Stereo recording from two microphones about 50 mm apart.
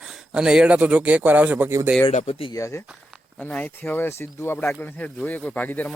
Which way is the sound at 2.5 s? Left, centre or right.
Left.